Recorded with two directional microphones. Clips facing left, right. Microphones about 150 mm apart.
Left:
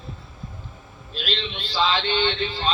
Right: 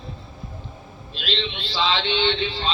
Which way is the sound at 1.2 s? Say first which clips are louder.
Right 2 dB; 45° left (ahead or behind).